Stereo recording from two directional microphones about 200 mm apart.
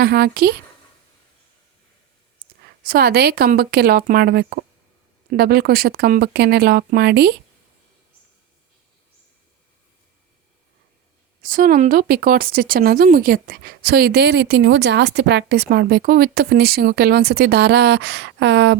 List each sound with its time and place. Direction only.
0.0 s speech: 50° right (ahead or behind)
2.8 s speech: 50° right (ahead or behind)
11.4 s speech: 45° right (ahead or behind); by 18.8 s 60° right (ahead or behind)